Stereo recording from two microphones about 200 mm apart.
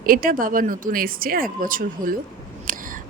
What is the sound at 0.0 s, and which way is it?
Speech, 45° right (ahead or behind).